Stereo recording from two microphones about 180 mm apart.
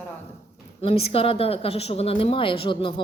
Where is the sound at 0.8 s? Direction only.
35° left (ahead or behind).